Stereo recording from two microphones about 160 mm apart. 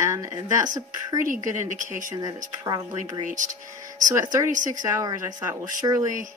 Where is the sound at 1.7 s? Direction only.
55° right (ahead or behind).